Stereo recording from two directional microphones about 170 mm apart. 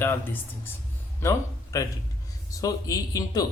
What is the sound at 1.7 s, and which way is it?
A man's voice, 20° left (ahead or behind).